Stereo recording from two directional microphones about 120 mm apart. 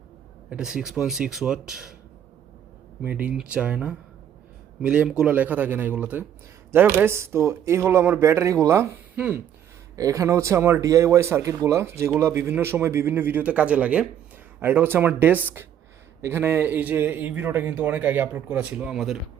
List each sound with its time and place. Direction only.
0.5 s speech: 5° right (ahead or behind)
3.0 s speech: 15° right (ahead or behind)
9.9 s speech: 30° right (ahead or behind); by 19.1 s 5° right (ahead or behind)